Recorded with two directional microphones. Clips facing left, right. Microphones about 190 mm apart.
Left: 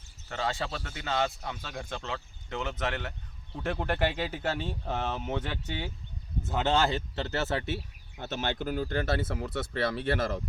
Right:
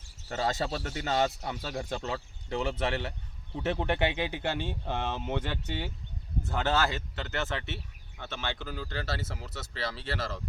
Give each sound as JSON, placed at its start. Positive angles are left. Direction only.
{"t": 0.3, "sound": "a man's voice", "side_deg": -40}
{"t": 3.1, "sound": "speech", "side_deg": -5}
{"t": 6.5, "sound": "speech", "side_deg": 20}
{"t": 7.2, "sound": "speech", "side_deg": 35}